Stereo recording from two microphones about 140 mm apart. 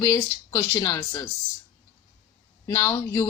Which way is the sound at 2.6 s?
25° left (ahead or behind).